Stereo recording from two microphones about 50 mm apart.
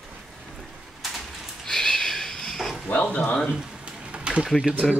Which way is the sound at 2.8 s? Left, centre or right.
Left.